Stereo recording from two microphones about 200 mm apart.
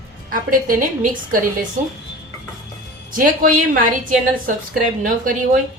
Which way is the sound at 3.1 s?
45° right (ahead or behind).